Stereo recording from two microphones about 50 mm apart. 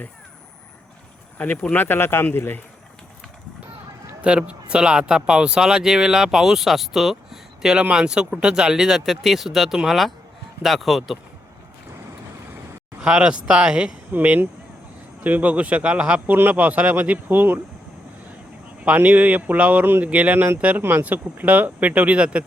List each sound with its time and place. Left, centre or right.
1.7 s speech: left
4.2 s a man's voice: right; by 11.2 s centre
13.0 s a man's voice: centre
14.1 s a man's voice: right
16.2 s speech: right
19.0 s speech: right
19.8 s speech: right
20.1 s a man's voice: right